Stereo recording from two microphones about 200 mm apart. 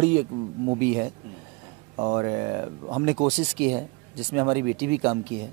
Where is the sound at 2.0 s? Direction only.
25° right (ahead or behind).